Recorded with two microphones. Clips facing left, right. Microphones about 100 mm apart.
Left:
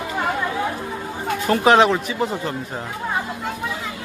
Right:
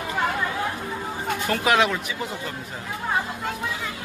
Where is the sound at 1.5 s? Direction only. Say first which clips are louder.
Left 7 dB; 30° left (ahead or behind).